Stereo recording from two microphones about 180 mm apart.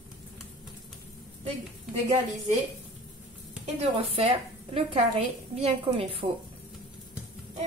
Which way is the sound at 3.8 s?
30° right (ahead or behind).